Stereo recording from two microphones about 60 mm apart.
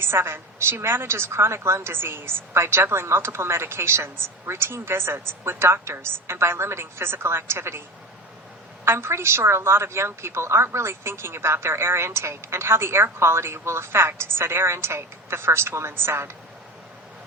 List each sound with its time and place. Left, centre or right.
0.0 s a woman's voice: right
8.8 s a woman's voice: right